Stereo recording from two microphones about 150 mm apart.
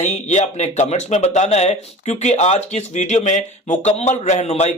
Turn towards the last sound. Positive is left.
turn(degrees=45)  # may be behind; listen again after turning